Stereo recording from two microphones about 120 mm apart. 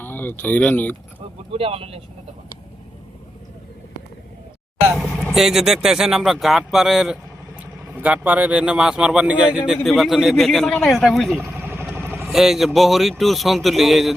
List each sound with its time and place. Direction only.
0.0 s speech: 15° left (ahead or behind)
1.5 s speech: 55° right (ahead or behind)
5.3 s speech: 5° right (ahead or behind)
11.3 s vehicle: 20° right (ahead or behind)
12.3 s speech: centre (ahead or behind)